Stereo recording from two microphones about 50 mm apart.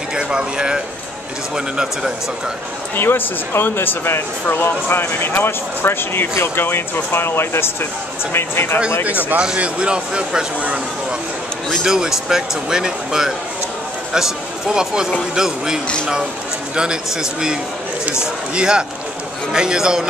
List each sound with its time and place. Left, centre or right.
0.1 s speech: centre
3.0 s speech: left
9.6 s speech: right
11.8 s speech: centre